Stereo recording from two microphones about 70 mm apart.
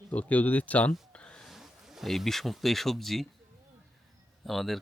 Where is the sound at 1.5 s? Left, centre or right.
Centre.